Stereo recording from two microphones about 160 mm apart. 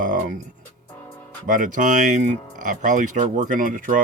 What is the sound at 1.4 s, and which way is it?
Speech, 55° right (ahead or behind).